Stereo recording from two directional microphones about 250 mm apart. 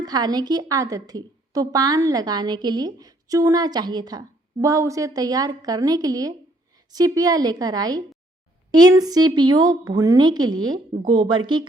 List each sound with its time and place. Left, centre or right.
0.0 s a woman's voice: centre